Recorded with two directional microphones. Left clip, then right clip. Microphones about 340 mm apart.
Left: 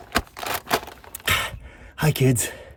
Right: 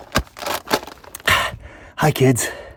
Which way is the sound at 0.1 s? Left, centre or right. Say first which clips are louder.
Right 3 dB; centre.